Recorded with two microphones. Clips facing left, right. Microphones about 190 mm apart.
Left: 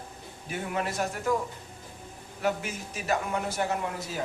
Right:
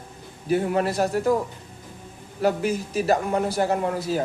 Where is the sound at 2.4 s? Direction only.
35° right (ahead or behind).